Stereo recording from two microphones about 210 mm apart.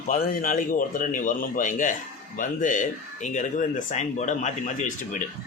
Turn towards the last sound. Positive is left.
turn(degrees=40)  # may be behind; listen again after turning